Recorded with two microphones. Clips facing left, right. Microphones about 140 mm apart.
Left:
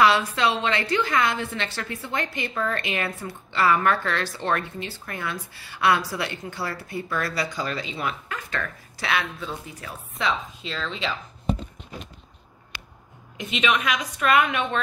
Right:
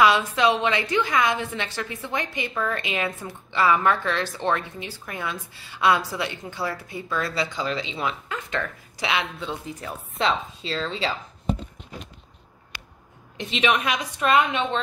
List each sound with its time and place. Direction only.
0.0 s a woman's voice: 20° right (ahead or behind); by 11.1 s 35° right (ahead or behind)
13.4 s a woman's voice: 35° right (ahead or behind)